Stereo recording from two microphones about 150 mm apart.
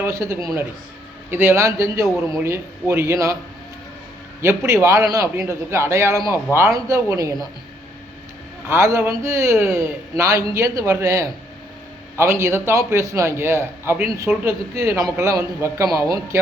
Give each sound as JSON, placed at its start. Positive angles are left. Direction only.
{"t": 0.0, "sound": "a man's voice", "side_deg": -20}
{"t": 4.4, "sound": "a man's voice", "side_deg": -20}
{"t": 8.6, "sound": "a man's voice", "side_deg": -15}